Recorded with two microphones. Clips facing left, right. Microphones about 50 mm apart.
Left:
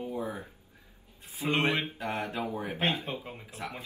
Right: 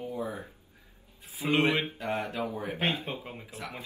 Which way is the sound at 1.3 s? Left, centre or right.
Right.